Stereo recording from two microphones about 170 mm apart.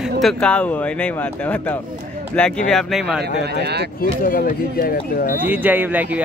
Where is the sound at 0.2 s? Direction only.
5° left (ahead or behind).